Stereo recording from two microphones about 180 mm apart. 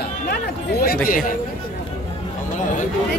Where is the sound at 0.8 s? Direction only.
55° left (ahead or behind).